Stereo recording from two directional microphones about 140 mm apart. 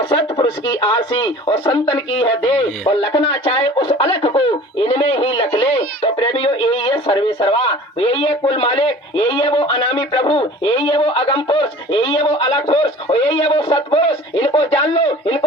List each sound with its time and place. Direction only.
0.0 s speech: 35° left (ahead or behind)